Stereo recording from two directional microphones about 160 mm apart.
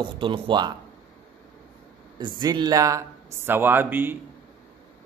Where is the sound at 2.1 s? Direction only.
25° right (ahead or behind).